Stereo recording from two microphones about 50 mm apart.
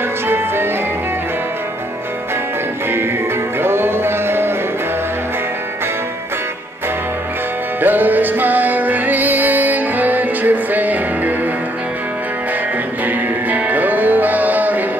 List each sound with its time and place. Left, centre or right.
3.6 s a sound: right
7.8 s music: right
13.0 s music: right